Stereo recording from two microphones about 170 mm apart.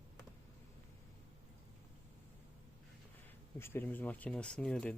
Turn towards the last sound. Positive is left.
turn(degrees=5)  # may be behind; listen again after turning